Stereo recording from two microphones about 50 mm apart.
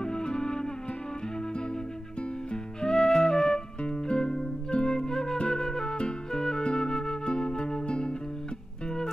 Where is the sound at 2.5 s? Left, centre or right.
Centre.